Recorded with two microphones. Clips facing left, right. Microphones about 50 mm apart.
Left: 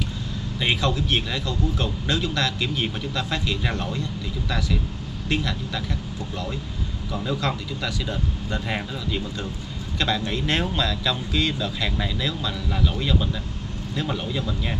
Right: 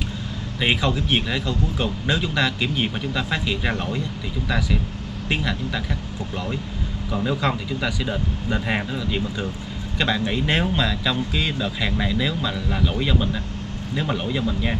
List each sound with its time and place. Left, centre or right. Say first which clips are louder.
0.6 s speech: right 2 dB; centre
5.3 s speech: right 1 dB; centre
7.1 s speech: right 3 dB; centre